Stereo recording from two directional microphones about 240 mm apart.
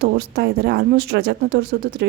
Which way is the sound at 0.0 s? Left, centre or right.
Right.